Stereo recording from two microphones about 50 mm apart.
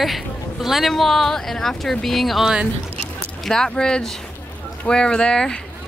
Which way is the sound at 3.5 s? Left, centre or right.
Centre.